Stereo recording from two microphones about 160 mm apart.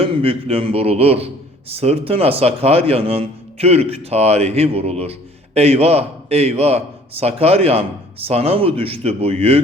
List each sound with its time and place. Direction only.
0.0 s a man's voice: 35° right (ahead or behind)